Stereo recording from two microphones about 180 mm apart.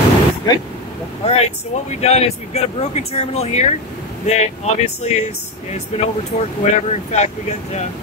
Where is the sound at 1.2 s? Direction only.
35° left (ahead or behind).